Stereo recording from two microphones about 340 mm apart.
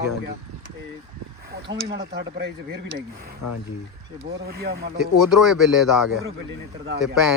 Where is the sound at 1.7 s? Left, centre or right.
Right.